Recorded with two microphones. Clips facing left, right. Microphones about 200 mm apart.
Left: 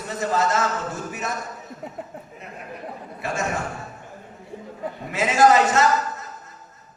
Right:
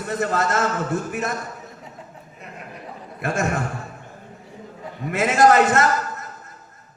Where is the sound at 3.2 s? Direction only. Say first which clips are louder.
Right 4 dB; 55° right (ahead or behind).